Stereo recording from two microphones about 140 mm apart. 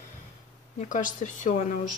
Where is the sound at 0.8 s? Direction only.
65° left (ahead or behind).